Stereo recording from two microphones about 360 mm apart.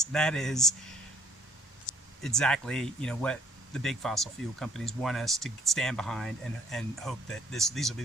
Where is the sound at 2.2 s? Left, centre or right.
Centre.